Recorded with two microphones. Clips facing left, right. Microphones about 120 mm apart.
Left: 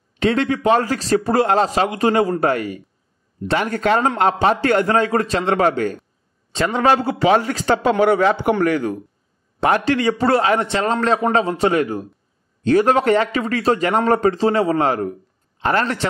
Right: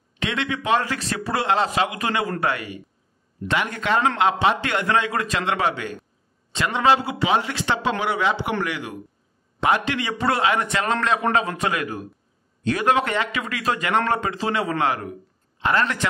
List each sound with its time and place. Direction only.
0.2 s a man's voice: 40° left (ahead or behind)